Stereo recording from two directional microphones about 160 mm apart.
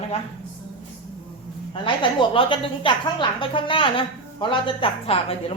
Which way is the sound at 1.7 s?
30° left (ahead or behind).